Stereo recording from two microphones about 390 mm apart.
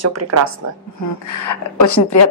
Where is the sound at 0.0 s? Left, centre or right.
Right.